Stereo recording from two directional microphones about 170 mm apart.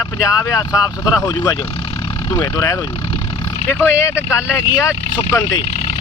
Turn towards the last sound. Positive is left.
turn(degrees=20)  # may be behind; listen again after turning